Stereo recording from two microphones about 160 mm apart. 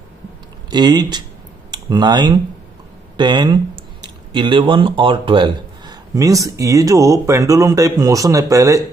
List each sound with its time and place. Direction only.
0.7 s speech: 25° right (ahead or behind)